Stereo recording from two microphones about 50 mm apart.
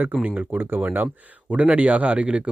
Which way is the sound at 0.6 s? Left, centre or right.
Right.